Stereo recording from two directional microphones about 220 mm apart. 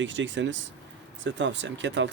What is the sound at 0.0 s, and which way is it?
Speech, 55° right (ahead or behind).